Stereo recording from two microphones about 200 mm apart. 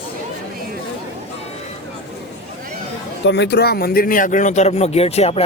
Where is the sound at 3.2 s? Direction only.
60° left (ahead or behind).